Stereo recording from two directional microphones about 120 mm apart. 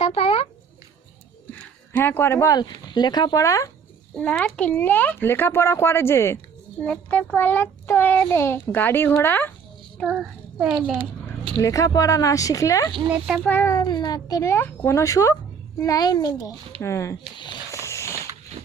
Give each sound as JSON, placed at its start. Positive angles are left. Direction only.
{"t": 0.0, "sound": "a sound", "side_deg": 55}
{"t": 2.0, "sound": "speech", "side_deg": 15}
{"t": 2.6, "sound": "speech", "side_deg": 35}
{"t": 4.2, "sound": "speech", "side_deg": 10}
{"t": 10.1, "sound": "a child's voice", "side_deg": -5}
{"t": 11.5, "sound": "speech", "side_deg": 30}
{"t": 13.1, "sound": "a child's voice", "side_deg": -5}
{"t": 13.4, "sound": "speech", "side_deg": 15}
{"t": 13.8, "sound": "speech", "side_deg": 35}
{"t": 17.3, "sound": "speech", "side_deg": 40}
{"t": 17.7, "sound": "a sound", "side_deg": 25}
{"t": 18.6, "sound": "horse", "side_deg": -65}